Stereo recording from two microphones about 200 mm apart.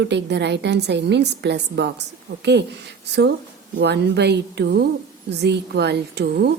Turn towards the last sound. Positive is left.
turn(degrees=-55)  # may be behind; listen again after turning